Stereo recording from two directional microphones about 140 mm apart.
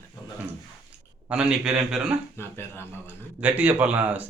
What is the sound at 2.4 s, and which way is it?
Speech, 15° left (ahead or behind).